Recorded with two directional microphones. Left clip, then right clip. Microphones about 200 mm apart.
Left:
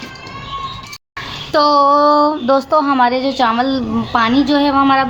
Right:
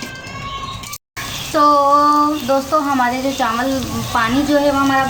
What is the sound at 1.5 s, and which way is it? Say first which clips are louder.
Speech: left 1 dB; 50° left (ahead or behind).